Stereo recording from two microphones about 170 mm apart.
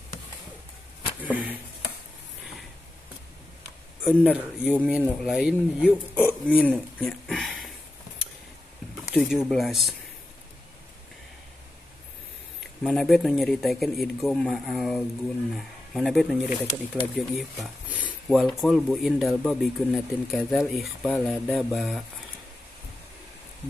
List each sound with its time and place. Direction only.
1.2 s speech: 10° right (ahead or behind)
4.0 s speech: 5° right (ahead or behind)
9.1 s speech: centre (ahead or behind)
12.8 s speech: centre (ahead or behind)